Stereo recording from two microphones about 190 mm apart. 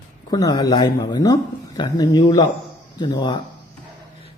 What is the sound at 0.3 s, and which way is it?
Speech, 20° left (ahead or behind).